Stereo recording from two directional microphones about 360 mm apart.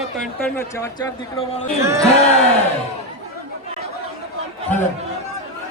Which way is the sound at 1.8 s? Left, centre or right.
Centre.